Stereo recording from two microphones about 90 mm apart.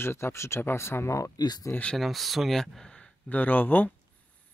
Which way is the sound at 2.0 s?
Centre (ahead or behind).